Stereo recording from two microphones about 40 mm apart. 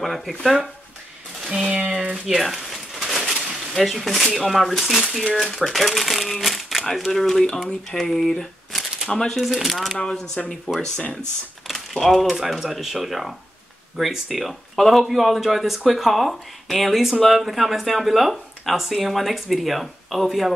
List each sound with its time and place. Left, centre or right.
0.0 s a man's voice: centre
1.5 s a sound: right
2.2 s a sound: centre
3.3 s a man's voice: centre
8.7 s shuffling cards: centre
9.4 s a man's voice: centre
10.4 s speech: left
11.7 s a man's voice: centre